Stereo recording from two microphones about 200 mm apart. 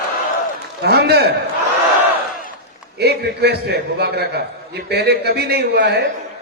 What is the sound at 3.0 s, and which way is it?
A man's voice, 55° right (ahead or behind).